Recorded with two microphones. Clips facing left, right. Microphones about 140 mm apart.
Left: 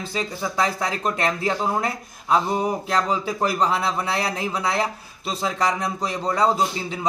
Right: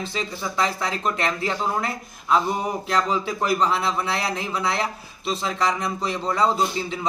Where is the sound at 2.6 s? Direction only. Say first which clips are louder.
Left 1 dB; 10° left (ahead or behind).